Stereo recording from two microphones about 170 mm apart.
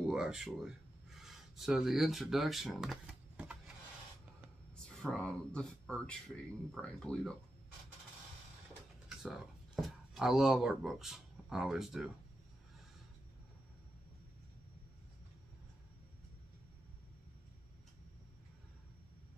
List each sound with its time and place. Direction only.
0.1 s speech: 5° right (ahead or behind)
4.9 s speech: 5° left (ahead or behind)
9.2 s speech: centre (ahead or behind)